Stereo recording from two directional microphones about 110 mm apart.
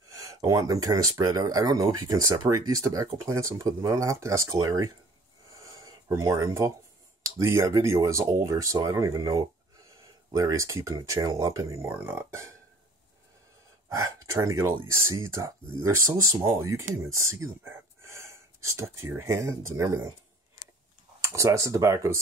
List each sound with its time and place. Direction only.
0.2 s speech: 30° right (ahead or behind)
5.5 s a sound: 30° right (ahead or behind)
7.2 s speech: 30° right (ahead or behind)
13.8 s speech: 30° right (ahead or behind)
21.3 s speech: 30° right (ahead or behind)